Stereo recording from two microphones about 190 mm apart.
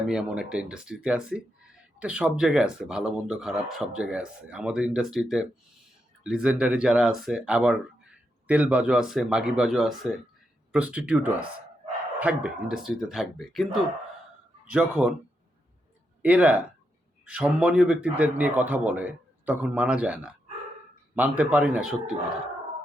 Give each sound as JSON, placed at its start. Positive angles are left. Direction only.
{"t": 0.1, "sound": "speech", "side_deg": -5}
{"t": 14.7, "sound": "speech", "side_deg": -5}
{"t": 16.2, "sound": "a man's voice", "side_deg": -5}